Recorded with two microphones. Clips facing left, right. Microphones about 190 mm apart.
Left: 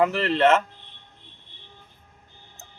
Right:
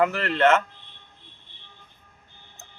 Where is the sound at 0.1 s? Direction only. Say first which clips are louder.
Left 1 dB; 30° left (ahead or behind).